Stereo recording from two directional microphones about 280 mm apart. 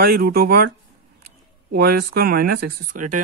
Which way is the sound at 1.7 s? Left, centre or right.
Right.